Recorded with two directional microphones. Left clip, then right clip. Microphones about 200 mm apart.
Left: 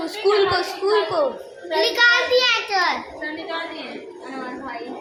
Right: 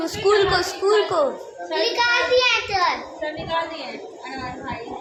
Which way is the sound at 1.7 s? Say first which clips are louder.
Left 3 dB; 45° left (ahead or behind).